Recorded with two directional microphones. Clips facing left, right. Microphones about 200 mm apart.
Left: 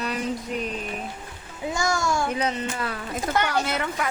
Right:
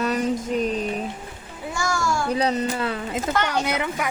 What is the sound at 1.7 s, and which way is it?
Speech, 20° left (ahead or behind).